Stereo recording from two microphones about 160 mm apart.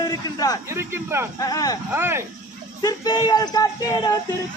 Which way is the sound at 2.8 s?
25° left (ahead or behind).